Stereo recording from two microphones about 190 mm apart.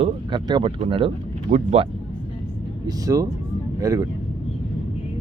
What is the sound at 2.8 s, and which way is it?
Speech, 20° right (ahead or behind).